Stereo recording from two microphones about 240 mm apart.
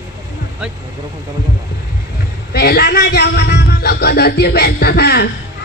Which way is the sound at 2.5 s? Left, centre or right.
Left.